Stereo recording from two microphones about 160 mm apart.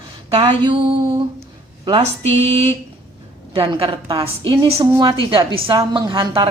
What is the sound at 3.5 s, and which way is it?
Speech, 35° right (ahead or behind).